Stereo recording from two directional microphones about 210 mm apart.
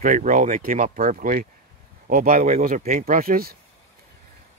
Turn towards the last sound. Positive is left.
turn(degrees=-45)  # may be behind; listen again after turning